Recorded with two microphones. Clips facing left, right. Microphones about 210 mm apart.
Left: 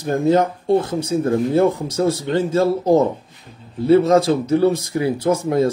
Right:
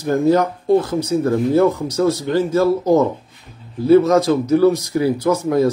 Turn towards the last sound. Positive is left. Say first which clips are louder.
# right 1 dB
turn(degrees=25)  # may be behind; listen again after turning